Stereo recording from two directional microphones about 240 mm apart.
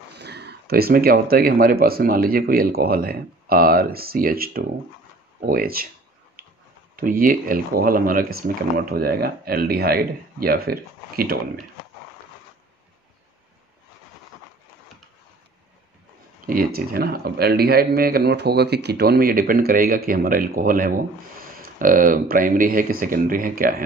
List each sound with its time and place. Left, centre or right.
0.1 s speech: right
7.0 s speech: right
16.4 s speech: right